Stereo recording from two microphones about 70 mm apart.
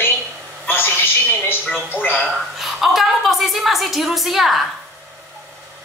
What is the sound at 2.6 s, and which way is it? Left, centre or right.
A woman's voice, centre.